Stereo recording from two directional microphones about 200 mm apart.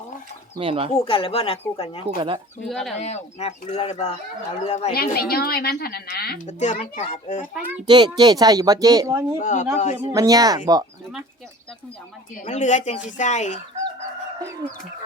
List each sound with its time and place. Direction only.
0.6 s speech: 30° right (ahead or behind)
0.9 s speech: 25° left (ahead or behind)
2.0 s speech: 25° right (ahead or behind)
2.6 s speech: centre (ahead or behind)
3.0 s speech: 35° left (ahead or behind)
4.9 s a woman's voice: 50° left (ahead or behind)
6.5 s speech: 35° left (ahead or behind)
7.5 s speech: 10° right (ahead or behind)
7.9 s speech: 20° right (ahead or behind)
9.4 s speech: 40° left (ahead or behind)
10.1 s speech: 15° right (ahead or behind)
12.4 s speech: 40° left (ahead or behind)